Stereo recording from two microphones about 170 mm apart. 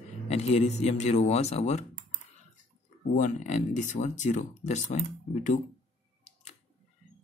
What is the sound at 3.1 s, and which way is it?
Speech, 45° left (ahead or behind).